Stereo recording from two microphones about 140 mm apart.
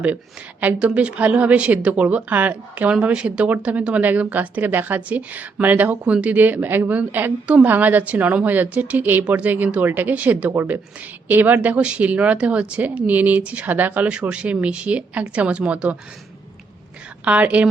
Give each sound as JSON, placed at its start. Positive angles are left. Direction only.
{"t": 0.6, "sound": "a woman's voice", "side_deg": -10}
{"t": 17.2, "sound": "a woman's voice", "side_deg": -10}